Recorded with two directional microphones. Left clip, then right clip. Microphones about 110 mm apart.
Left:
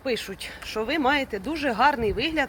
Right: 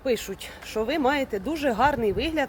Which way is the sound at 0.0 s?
35° right (ahead or behind).